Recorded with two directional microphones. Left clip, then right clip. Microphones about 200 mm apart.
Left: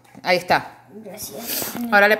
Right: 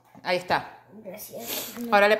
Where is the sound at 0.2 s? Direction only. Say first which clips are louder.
Left 7 dB; 15° left (ahead or behind).